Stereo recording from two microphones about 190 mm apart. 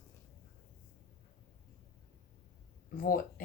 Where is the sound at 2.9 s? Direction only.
45° left (ahead or behind).